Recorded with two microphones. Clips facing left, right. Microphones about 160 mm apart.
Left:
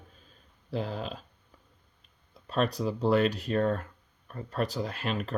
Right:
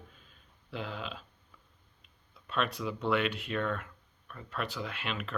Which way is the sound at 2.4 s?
35° left (ahead or behind).